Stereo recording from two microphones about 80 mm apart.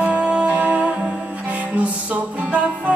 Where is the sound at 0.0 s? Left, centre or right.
Centre.